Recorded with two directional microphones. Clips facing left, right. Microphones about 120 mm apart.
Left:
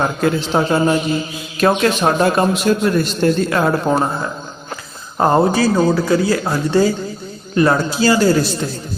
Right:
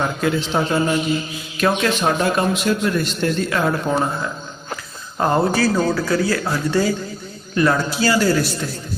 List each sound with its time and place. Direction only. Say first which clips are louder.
0.0 s a man's voice: left 3 dB; 45° left (ahead or behind)
5.5 s speech: left 4 dB; 20° left (ahead or behind)